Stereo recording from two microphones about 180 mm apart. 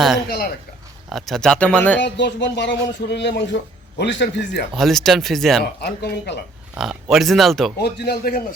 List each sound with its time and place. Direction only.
0.3 s speech: 60° left (ahead or behind)
1.1 s speech: centre (ahead or behind)
2.0 s speech: 70° left (ahead or behind)
4.7 s speech: centre (ahead or behind)
5.8 s speech: 65° left (ahead or behind)
6.7 s speech: centre (ahead or behind)
7.8 s speech: 65° left (ahead or behind)